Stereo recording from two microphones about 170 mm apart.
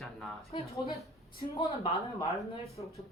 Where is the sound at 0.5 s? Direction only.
30° left (ahead or behind).